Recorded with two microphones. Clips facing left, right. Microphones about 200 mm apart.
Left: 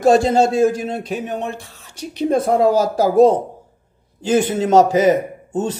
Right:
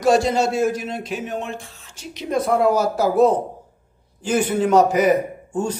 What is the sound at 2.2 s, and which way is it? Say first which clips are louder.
Speech: left 4 dB; 25° left (ahead or behind).